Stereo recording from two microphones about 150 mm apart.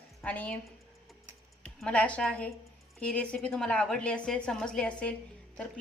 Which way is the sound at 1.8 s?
10° left (ahead or behind).